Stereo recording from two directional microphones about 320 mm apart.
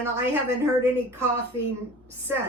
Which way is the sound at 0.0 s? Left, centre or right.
Centre.